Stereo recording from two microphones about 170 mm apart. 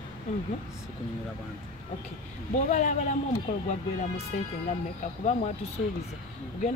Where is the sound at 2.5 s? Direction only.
45° left (ahead or behind).